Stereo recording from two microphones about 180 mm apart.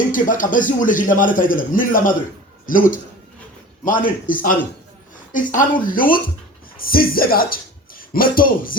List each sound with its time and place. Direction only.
0.1 s a man's voice: 50° left (ahead or behind)